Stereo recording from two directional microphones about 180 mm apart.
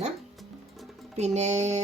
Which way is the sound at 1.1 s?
40° right (ahead or behind).